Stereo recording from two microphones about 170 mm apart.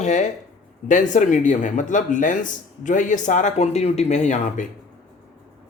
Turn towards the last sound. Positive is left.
turn(degrees=45)  # may be behind; listen again after turning